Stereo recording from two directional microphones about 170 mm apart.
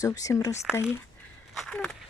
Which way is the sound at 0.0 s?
20° left (ahead or behind).